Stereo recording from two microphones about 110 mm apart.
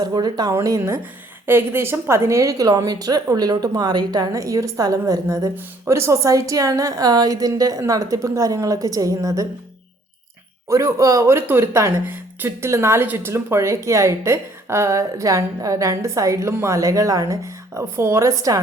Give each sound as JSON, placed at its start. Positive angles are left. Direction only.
{"t": 0.0, "sound": "speech", "side_deg": -40}
{"t": 10.7, "sound": "speech", "side_deg": -30}